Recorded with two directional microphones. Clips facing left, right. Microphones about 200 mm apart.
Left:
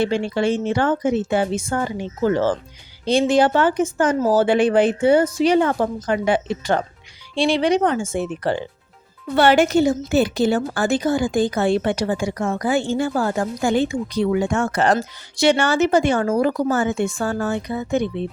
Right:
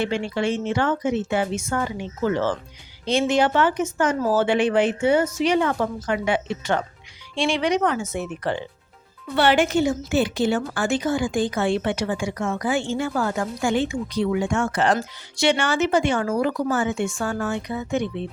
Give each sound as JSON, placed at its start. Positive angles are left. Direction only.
{"t": 0.0, "sound": "speech", "side_deg": 35}
{"t": 9.3, "sound": "speech", "side_deg": 45}